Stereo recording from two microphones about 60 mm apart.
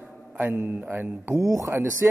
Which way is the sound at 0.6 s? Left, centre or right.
Right.